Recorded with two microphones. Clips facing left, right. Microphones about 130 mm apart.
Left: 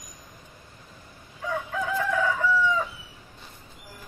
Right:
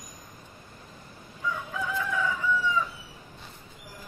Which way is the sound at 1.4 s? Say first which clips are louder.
Left 3 dB; 60° left (ahead or behind).